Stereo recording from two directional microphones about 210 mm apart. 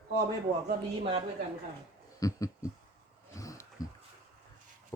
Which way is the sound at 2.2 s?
15° left (ahead or behind).